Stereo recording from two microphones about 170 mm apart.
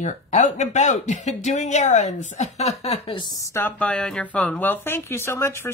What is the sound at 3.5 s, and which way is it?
Speech, 10° left (ahead or behind).